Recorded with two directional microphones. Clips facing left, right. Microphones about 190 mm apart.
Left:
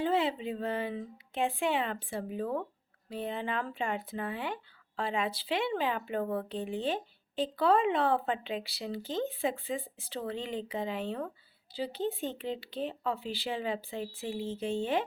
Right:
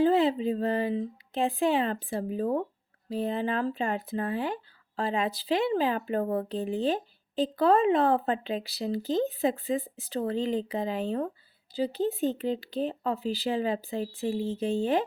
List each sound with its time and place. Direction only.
0.0 s speech: 40° right (ahead or behind)